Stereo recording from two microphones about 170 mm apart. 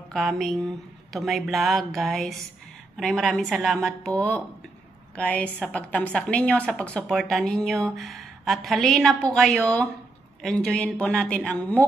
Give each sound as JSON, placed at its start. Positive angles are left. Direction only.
{"t": 0.1, "sound": "a woman's voice", "side_deg": 0}